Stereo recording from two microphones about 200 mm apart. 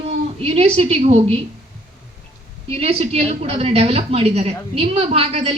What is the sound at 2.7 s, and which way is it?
A woman's voice, 30° right (ahead or behind).